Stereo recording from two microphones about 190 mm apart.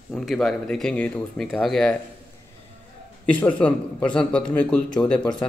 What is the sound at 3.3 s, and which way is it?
A man's voice, 5° left (ahead or behind).